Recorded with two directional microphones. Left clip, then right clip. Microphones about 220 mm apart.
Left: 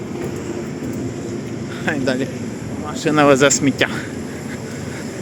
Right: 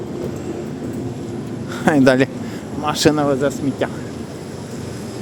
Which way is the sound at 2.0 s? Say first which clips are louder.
Right 8 dB; 50° right (ahead or behind).